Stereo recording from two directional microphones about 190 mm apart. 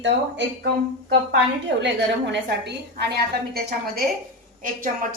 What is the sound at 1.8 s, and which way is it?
A woman's voice, 65° right (ahead or behind).